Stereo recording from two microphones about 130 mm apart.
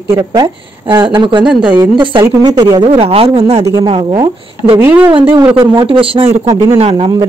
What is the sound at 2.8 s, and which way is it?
Speech, 50° right (ahead or behind).